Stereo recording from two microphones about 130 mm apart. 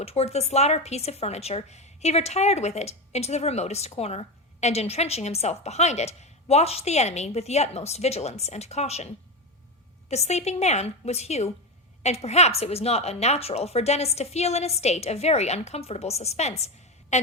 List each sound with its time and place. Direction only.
0.0 s speech: 50° left (ahead or behind)